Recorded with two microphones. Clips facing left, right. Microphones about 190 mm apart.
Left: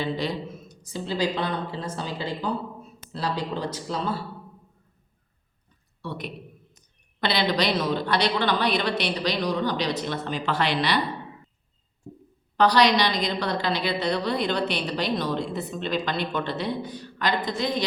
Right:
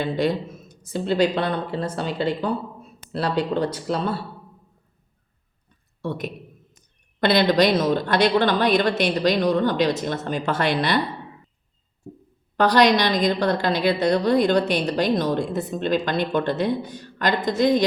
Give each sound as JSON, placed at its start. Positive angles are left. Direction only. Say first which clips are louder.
{"t": 0.0, "sound": "speech", "louder": "right 5 dB", "side_deg": -55}
{"t": 6.0, "sound": "a man's voice", "louder": "right 6 dB", "side_deg": -45}
{"t": 12.5, "sound": "a woman's voice", "louder": "right 3 dB", "side_deg": -50}